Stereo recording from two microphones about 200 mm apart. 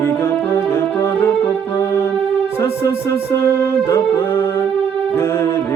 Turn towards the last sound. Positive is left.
turn(degrees=10)  # may be behind; listen again after turning